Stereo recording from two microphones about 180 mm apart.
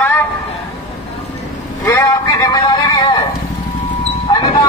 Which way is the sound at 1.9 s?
20° left (ahead or behind).